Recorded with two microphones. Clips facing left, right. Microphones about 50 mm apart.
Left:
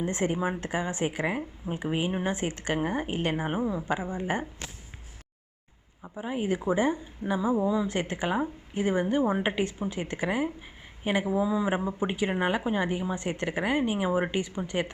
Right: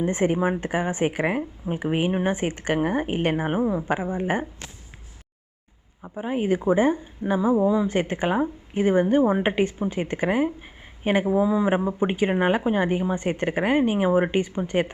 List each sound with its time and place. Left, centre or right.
0.0 s a woman's voice: right
1.4 s a woman's voice: right
1.8 s a woman's voice: right
3.7 s speech: right
6.1 s speech: right